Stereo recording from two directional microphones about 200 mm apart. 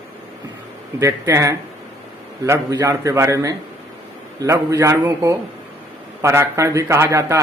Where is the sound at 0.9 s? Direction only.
15° right (ahead or behind).